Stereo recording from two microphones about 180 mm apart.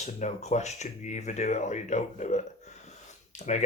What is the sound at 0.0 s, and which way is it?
Speech, 40° left (ahead or behind).